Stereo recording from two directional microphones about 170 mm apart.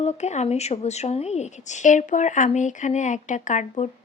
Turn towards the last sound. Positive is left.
turn(degrees=45)  # may be behind; listen again after turning